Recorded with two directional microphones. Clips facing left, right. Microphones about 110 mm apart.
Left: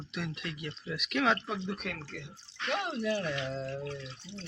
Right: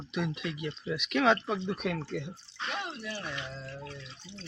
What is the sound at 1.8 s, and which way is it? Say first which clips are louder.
Speech: right 7 dB; 15° right (ahead or behind).